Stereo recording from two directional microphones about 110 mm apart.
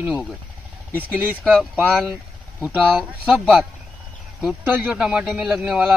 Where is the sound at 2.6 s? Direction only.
15° right (ahead or behind).